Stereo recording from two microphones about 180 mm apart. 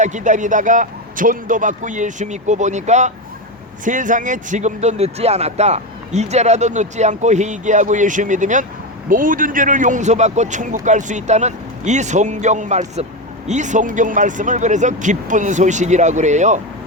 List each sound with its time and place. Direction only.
0.0 s speech: 45° right (ahead or behind)